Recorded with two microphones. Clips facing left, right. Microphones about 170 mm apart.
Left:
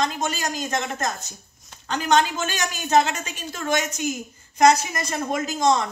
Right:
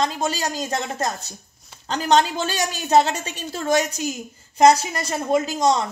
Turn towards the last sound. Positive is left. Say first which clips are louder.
# right 2 dB
turn(degrees=-30)  # may be behind; listen again after turning